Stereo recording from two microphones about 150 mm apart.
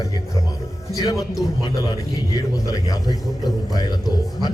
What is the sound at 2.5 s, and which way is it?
A man's voice, 25° left (ahead or behind).